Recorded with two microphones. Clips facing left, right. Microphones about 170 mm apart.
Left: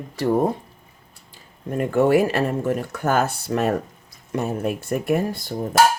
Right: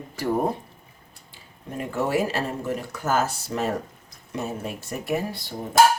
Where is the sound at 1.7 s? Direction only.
60° left (ahead or behind).